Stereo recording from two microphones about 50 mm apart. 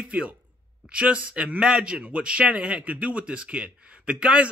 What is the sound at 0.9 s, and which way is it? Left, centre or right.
Speech, right.